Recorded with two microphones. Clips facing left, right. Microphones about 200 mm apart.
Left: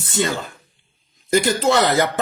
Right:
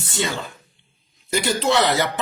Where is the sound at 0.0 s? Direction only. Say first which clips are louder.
Left 4 dB; 45° left (ahead or behind).